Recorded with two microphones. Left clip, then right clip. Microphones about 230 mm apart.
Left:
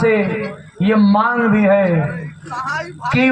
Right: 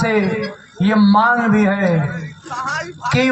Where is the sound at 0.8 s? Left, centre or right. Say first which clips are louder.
Right 1 dB; right.